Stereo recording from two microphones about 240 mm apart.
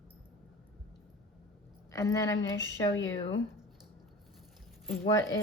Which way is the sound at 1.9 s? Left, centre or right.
Centre.